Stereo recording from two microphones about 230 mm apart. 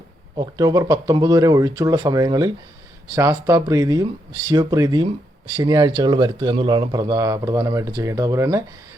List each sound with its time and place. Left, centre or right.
0.3 s a man's voice: centre